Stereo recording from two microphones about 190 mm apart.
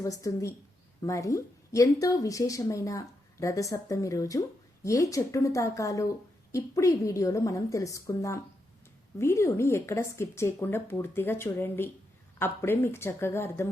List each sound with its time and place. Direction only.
0.0 s speech: 15° left (ahead or behind)